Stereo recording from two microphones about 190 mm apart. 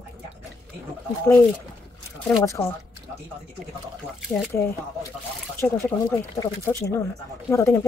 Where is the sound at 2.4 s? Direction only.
15° left (ahead or behind).